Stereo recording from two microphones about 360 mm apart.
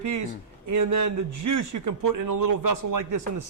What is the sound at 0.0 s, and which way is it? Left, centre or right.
A man's voice, right.